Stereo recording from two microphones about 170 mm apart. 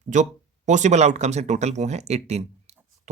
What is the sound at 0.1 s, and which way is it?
Speech, 45° right (ahead or behind).